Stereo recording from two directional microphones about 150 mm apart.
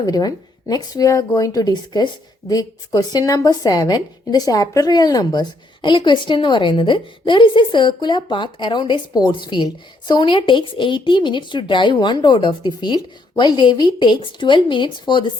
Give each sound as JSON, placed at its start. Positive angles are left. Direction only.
{"t": 0.0, "sound": "speech", "side_deg": 25}